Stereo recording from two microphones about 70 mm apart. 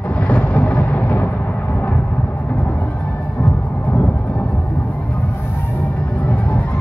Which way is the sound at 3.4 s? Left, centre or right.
Centre.